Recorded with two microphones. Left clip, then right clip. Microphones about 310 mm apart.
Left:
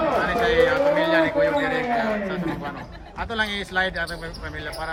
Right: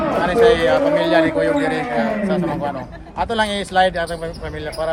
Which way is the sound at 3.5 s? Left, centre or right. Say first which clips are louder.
Right 8 dB; right.